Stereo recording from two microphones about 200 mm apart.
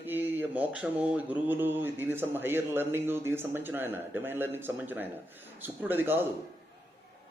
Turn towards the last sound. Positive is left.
turn(degrees=-10)  # may be behind; listen again after turning